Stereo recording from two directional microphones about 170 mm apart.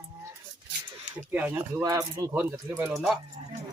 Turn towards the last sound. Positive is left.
turn(degrees=0)  # may be behind; listen again after turning